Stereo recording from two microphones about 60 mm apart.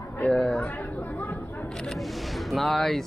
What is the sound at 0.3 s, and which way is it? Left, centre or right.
Chatter, centre.